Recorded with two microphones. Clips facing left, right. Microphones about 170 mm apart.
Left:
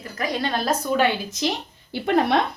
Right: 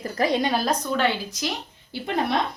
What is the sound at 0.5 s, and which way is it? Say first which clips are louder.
Speech: left 2 dB; 5° left (ahead or behind).